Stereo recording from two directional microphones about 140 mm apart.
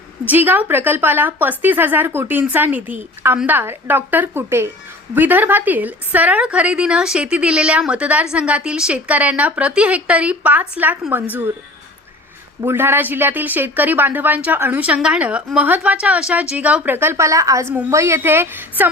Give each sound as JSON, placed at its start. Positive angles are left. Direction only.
{"t": 0.3, "sound": "a woman's voice", "side_deg": -15}
{"t": 12.6, "sound": "a woman's voice", "side_deg": -15}